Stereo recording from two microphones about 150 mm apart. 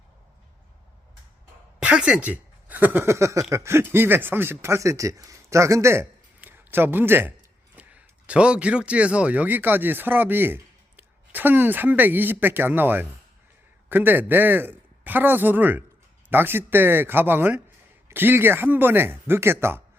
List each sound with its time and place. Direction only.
1.8 s speech: 5° right (ahead or behind)